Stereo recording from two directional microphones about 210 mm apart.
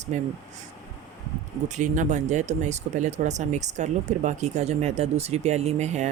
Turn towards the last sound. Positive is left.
turn(degrees=-35)  # may be behind; listen again after turning